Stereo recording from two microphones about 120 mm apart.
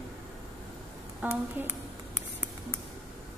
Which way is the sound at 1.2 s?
15° right (ahead or behind).